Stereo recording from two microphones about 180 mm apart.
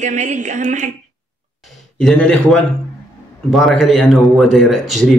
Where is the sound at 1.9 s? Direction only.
5° left (ahead or behind).